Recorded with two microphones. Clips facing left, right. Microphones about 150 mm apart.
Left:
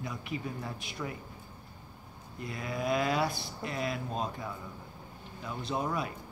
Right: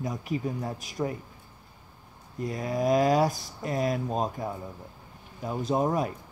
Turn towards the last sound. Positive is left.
turn(degrees=-45)  # may be behind; listen again after turning